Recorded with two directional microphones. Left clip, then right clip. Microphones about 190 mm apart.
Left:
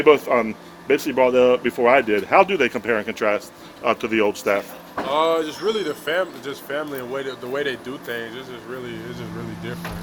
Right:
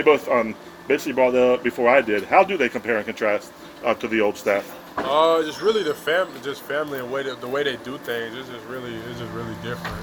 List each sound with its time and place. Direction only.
0.0 s speech: 45° left (ahead or behind); by 4.6 s 30° left (ahead or behind)
4.9 s speech: 5° left (ahead or behind)